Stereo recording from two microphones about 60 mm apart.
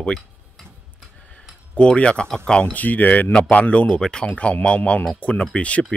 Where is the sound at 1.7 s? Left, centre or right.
Centre.